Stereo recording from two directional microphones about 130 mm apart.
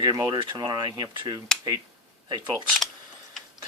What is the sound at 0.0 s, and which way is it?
Speech, 30° right (ahead or behind).